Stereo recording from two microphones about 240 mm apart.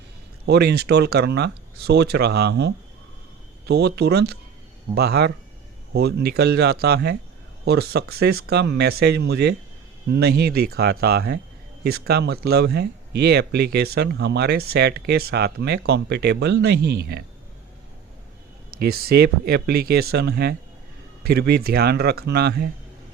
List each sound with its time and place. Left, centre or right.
0.4 s speech: right
18.8 s speech: right